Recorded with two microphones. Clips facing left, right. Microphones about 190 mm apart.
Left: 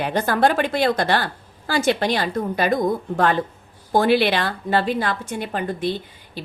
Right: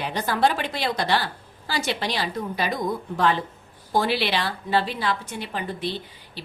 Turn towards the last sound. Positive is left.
turn(degrees=50)  # may be behind; listen again after turning